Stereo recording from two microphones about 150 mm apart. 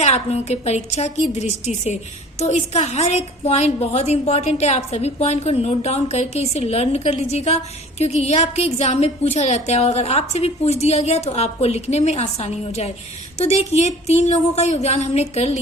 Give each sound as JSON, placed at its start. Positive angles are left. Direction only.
{"t": 0.0, "sound": "a woman's voice", "side_deg": 45}